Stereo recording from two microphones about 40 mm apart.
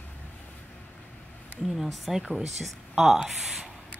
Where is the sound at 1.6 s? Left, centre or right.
Centre.